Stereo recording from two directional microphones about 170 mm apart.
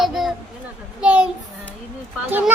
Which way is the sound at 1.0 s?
5° right (ahead or behind).